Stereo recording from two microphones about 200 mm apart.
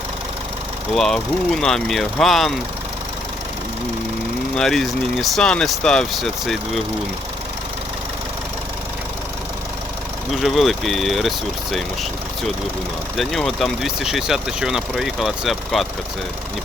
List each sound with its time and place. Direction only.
0.9 s speech: centre (ahead or behind)
4.5 s speech: centre (ahead or behind)
10.4 s speech: centre (ahead or behind)
13.1 s speech: centre (ahead or behind)